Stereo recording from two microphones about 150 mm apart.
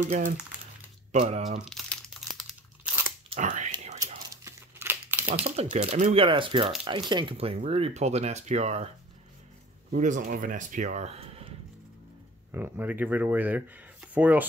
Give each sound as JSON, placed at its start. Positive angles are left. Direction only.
{"t": 1.1, "sound": "speech", "side_deg": -45}
{"t": 1.6, "sound": "crumpling", "side_deg": 5}
{"t": 2.8, "sound": "crunch", "side_deg": -10}
{"t": 3.3, "sound": "speech", "side_deg": -55}
{"t": 4.5, "sound": "crumpling", "side_deg": -15}
{"t": 5.4, "sound": "speech", "side_deg": -45}
{"t": 6.1, "sound": "speech", "side_deg": -35}
{"t": 9.8, "sound": "speech", "side_deg": -55}
{"t": 12.5, "sound": "speech", "side_deg": -10}